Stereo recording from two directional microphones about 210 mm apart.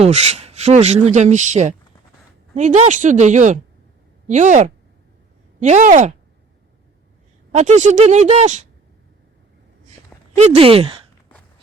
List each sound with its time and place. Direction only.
0.0 s speech: 30° right (ahead or behind)
7.5 s speech: 35° right (ahead or behind)
10.3 s speech: 30° right (ahead or behind)